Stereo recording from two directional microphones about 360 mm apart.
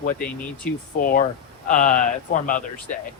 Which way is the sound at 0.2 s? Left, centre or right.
Centre.